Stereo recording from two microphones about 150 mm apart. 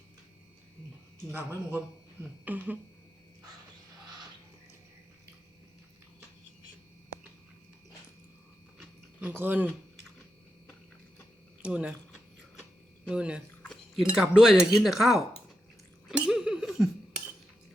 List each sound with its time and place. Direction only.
1.3 s speech: 15° right (ahead or behind)
9.2 s speech: 10° right (ahead or behind)
11.6 s speech: 10° right (ahead or behind)
13.1 s speech: 5° right (ahead or behind)
14.0 s cutlery: 5° right (ahead or behind)